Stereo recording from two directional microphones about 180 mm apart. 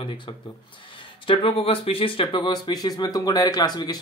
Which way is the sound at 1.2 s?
30° left (ahead or behind).